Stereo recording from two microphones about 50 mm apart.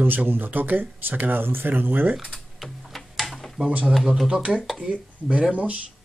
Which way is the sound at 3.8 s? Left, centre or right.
Centre.